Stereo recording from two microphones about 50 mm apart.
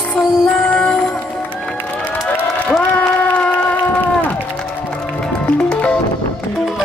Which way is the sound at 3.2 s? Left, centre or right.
Left.